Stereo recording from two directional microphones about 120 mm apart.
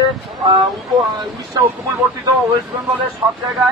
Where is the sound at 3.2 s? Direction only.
35° right (ahead or behind).